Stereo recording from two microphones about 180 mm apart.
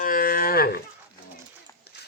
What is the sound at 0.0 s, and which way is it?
Livestock, 50° left (ahead or behind).